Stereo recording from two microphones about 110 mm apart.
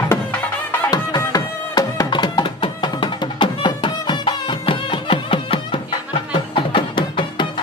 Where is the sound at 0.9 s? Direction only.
35° left (ahead or behind).